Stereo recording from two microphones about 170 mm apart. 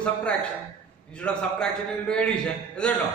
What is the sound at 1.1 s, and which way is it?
A man's voice, 5° left (ahead or behind).